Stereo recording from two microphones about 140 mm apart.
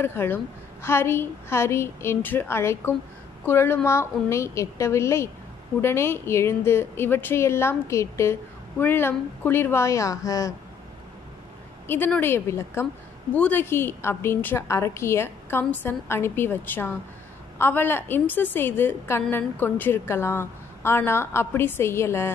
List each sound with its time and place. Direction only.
0.0 s a woman's voice: 15° left (ahead or behind)
11.9 s a woman's voice: 15° left (ahead or behind)